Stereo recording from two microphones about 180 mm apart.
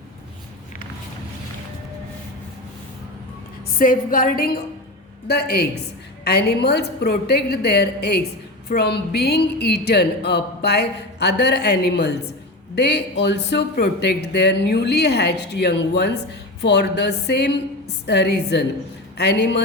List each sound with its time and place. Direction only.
3.7 s a woman's voice: 50° left (ahead or behind); by 19.6 s 70° left (ahead or behind)